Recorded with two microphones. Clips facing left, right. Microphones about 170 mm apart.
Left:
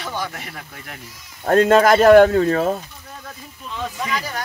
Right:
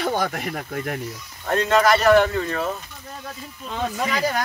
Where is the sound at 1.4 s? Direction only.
50° left (ahead or behind).